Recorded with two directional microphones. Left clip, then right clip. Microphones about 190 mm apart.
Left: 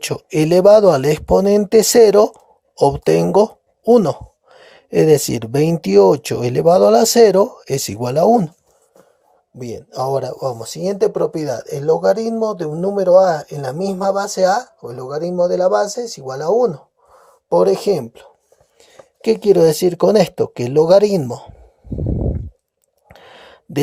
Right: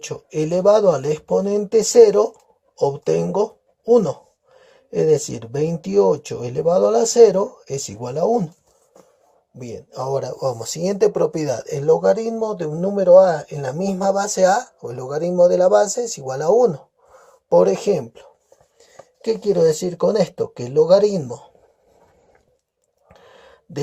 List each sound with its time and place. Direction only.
0.0 s speech: 45° left (ahead or behind)
9.6 s speech: 40° left (ahead or behind)
23.1 s a sound: 45° left (ahead or behind)